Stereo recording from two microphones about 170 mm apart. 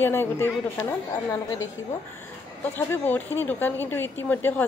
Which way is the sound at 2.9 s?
10° left (ahead or behind).